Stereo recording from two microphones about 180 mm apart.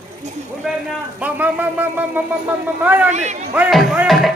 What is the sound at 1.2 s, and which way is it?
Speech, 10° right (ahead or behind).